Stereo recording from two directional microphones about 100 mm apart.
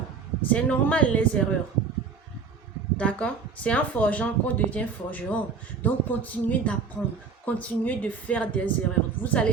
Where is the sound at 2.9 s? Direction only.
10° left (ahead or behind).